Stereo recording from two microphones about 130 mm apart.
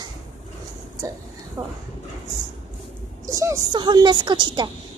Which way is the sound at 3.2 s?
25° right (ahead or behind).